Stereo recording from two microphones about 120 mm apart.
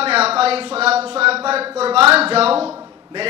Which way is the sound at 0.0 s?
55° right (ahead or behind).